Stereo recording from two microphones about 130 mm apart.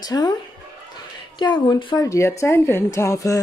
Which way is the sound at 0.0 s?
30° left (ahead or behind).